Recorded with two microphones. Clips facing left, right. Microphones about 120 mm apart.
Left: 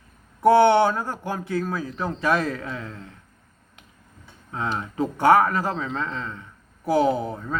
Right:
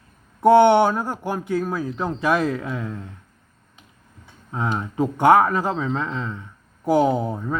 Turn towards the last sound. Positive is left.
turn(degrees=-15)  # may be behind; listen again after turning